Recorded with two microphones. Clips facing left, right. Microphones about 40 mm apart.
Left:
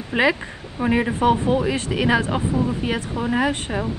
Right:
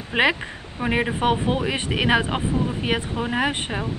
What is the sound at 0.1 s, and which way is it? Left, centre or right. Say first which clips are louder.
Speech: left 1 dB; right.